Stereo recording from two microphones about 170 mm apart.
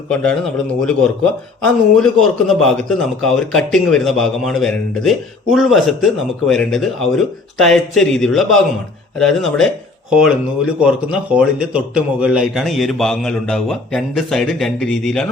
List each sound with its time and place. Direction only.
0.1 s a man's voice: 5° left (ahead or behind)